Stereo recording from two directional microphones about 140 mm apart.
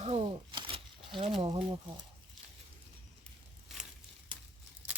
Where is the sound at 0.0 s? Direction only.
45° right (ahead or behind).